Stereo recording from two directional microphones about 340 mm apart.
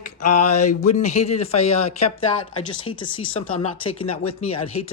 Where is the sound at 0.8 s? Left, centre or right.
Centre.